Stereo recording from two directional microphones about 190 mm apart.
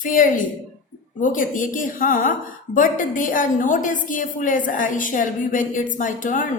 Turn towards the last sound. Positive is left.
turn(degrees=45)  # may be behind; listen again after turning